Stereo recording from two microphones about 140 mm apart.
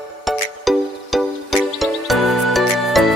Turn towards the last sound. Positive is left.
turn(degrees=0)  # may be behind; listen again after turning